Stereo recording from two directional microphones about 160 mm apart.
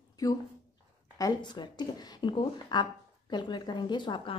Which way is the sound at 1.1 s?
25° left (ahead or behind).